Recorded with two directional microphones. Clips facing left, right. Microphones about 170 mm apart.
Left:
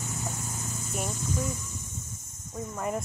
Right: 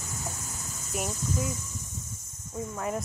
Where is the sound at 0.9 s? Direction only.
Centre (ahead or behind).